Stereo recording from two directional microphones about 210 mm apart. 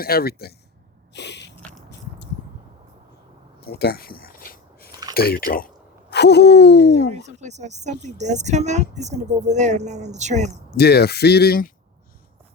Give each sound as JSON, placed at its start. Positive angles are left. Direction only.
{"t": 0.0, "sound": "speech", "side_deg": 45}
{"t": 1.1, "sound": "snort", "side_deg": 55}
{"t": 1.9, "sound": "biting", "side_deg": 55}
{"t": 3.6, "sound": "a sound", "side_deg": 50}
{"t": 5.1, "sound": "speech", "side_deg": 45}
{"t": 7.2, "sound": "speech", "side_deg": -35}
{"t": 10.7, "sound": "speech", "side_deg": 50}